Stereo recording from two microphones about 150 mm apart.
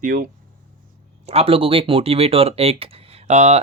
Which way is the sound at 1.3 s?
40° right (ahead or behind).